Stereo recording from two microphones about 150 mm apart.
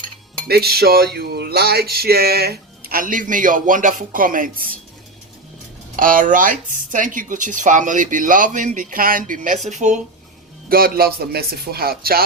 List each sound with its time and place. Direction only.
0.4 s speech: 90° right
2.9 s speech: 65° right (ahead or behind)
6.0 s speech: 65° right (ahead or behind)
10.7 s speech: 85° right